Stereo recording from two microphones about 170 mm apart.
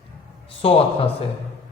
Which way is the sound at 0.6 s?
35° left (ahead or behind).